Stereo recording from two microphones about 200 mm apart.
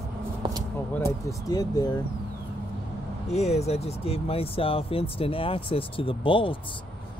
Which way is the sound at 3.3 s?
35° left (ahead or behind).